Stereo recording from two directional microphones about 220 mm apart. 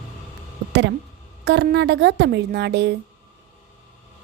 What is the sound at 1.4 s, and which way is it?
A woman's voice, 50° right (ahead or behind).